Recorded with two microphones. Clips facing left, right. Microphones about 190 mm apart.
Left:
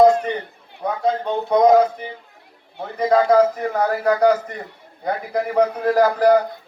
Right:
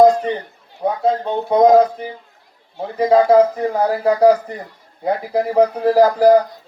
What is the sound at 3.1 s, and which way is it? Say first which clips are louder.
A man's voice: right 3 dB; 30° right (ahead or behind).